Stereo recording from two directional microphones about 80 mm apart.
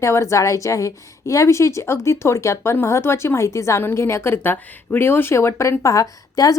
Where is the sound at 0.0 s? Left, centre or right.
Left.